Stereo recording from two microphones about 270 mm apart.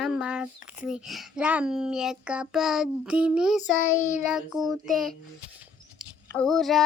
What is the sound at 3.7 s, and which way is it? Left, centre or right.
Child singing, left.